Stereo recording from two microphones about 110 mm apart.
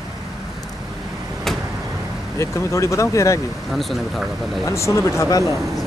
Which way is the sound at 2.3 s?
25° left (ahead or behind).